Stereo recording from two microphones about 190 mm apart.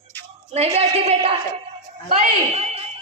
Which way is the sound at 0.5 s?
35° right (ahead or behind).